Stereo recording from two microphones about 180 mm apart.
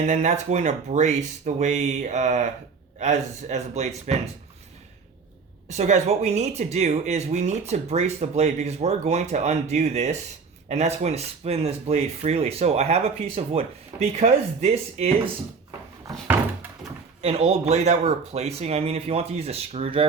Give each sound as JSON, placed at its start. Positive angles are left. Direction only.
{"t": 0.0, "sound": "speech", "side_deg": -40}
{"t": 5.7, "sound": "speech", "side_deg": -40}
{"t": 17.2, "sound": "speech", "side_deg": -35}